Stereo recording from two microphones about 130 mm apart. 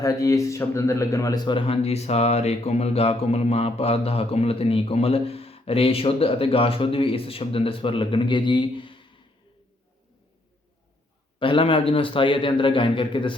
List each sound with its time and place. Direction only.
0.0 s speech: 25° left (ahead or behind); by 9.0 s 40° left (ahead or behind)
11.3 s a man's voice: 40° left (ahead or behind)